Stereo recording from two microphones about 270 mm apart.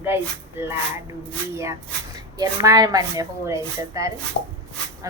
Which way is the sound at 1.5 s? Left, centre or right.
Centre.